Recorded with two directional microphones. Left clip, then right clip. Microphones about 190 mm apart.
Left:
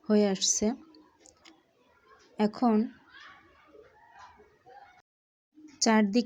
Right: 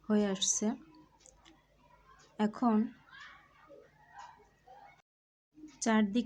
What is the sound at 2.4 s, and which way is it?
Speech, 15° left (ahead or behind).